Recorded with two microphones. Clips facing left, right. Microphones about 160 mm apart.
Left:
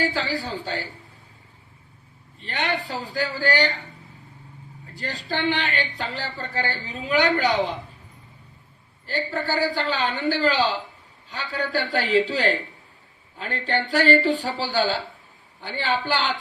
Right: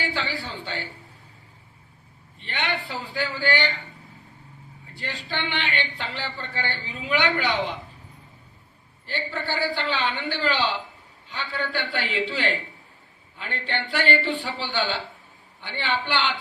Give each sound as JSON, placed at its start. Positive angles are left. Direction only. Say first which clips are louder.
{"t": 0.0, "sound": "a man's voice", "louder": "left 4 dB", "side_deg": 40}
{"t": 2.4, "sound": "a man's voice", "louder": "left 3 dB", "side_deg": 40}
{"t": 4.9, "sound": "a man's voice", "louder": "left 3 dB", "side_deg": 40}
{"t": 9.0, "sound": "a man's voice", "louder": "left 4 dB", "side_deg": 40}